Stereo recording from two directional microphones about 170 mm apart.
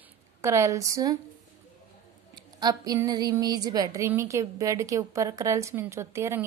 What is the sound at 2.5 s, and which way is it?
A woman's voice, 25° right (ahead or behind).